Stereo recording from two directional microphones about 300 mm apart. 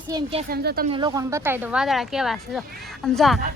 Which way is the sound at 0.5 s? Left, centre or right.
Right.